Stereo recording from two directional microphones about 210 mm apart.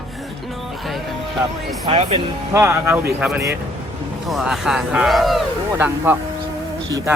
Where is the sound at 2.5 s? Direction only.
15° right (ahead or behind).